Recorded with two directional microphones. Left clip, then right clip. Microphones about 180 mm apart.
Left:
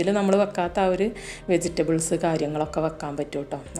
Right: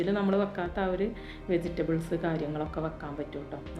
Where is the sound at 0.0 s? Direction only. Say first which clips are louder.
Left 7 dB; 40° left (ahead or behind).